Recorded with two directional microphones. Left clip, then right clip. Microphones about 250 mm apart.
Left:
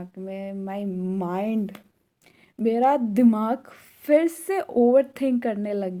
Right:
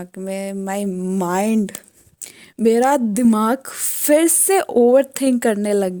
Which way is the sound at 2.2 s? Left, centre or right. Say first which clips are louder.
Right 16 dB; right.